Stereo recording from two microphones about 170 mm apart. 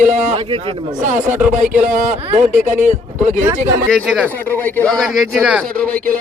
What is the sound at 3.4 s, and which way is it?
Speech, 15° right (ahead or behind).